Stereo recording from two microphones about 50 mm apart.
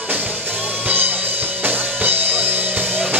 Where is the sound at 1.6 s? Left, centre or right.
Right.